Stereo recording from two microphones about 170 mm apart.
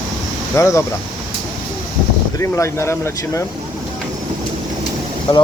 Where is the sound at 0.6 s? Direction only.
15° left (ahead or behind).